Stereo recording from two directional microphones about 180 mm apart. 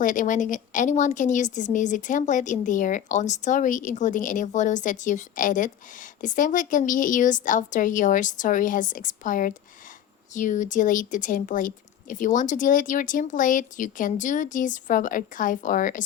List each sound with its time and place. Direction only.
0.0 s speech: 45° left (ahead or behind)